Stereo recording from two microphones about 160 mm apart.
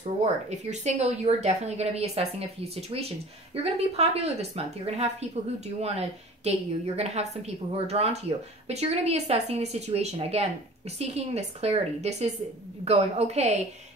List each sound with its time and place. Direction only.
0.0 s speech: 45° right (ahead or behind)